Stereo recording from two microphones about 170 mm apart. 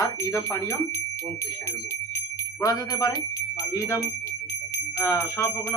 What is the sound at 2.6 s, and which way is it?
Speech, 20° left (ahead or behind).